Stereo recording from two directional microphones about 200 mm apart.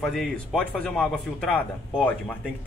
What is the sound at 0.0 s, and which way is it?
A man's voice, centre (ahead or behind).